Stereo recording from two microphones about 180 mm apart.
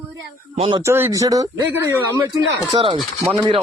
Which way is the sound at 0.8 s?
15° right (ahead or behind).